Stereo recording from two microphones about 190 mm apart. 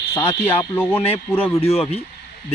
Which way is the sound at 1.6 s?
30° left (ahead or behind).